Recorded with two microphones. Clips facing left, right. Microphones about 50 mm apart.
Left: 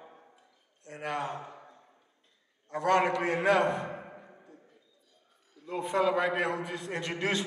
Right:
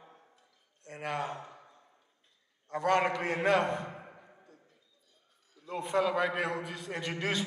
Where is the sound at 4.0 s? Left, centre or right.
Centre.